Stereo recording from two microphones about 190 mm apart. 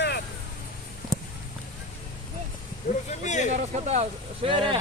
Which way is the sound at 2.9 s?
40° left (ahead or behind).